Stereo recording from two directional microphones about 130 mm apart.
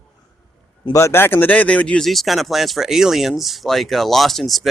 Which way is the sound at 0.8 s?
25° left (ahead or behind).